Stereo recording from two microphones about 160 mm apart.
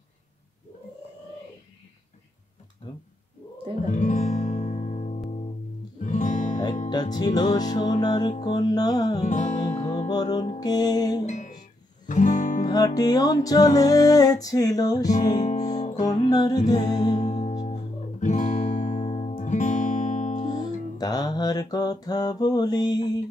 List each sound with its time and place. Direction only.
2.8 s music: 25° left (ahead or behind)
3.9 s music: 50° left (ahead or behind)
6.9 s music: 25° left (ahead or behind)
9.2 s music: 50° left (ahead or behind)
10.0 s music: 25° left (ahead or behind)
11.2 s speech: 50° left (ahead or behind)
12.1 s guitar: 50° left (ahead or behind)
12.6 s music: 25° left (ahead or behind)
17.2 s music: 45° left (ahead or behind)
20.6 s music: 25° left (ahead or behind)